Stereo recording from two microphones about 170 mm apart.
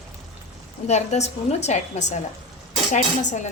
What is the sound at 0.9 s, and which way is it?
A woman's voice, 40° left (ahead or behind).